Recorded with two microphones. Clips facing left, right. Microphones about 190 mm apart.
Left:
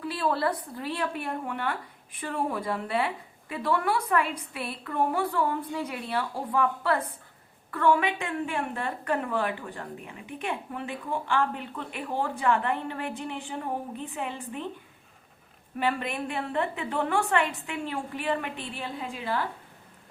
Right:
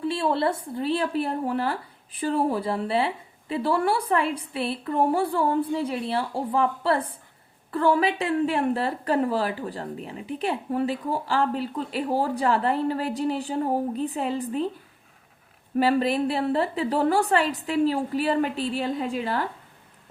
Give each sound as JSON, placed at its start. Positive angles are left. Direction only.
{"t": 0.0, "sound": "a woman's voice", "side_deg": -25}
{"t": 15.8, "sound": "a woman's voice", "side_deg": -35}